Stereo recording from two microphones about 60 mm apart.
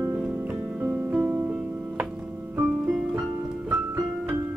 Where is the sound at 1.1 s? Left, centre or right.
Right.